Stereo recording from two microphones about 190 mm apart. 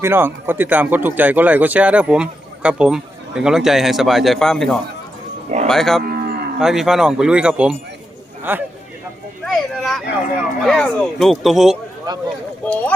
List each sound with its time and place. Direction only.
0.0 s speech: 10° right (ahead or behind)
6.0 s livestock: 55° right (ahead or behind)
6.6 s a man's voice: centre (ahead or behind)
9.5 s speech: centre (ahead or behind)